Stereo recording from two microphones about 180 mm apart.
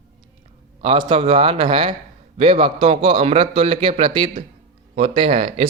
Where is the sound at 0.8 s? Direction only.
30° right (ahead or behind).